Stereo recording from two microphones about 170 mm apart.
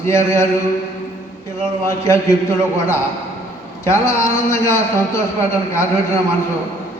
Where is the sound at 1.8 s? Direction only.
15° left (ahead or behind).